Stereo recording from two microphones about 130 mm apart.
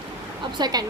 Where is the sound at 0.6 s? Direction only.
30° right (ahead or behind).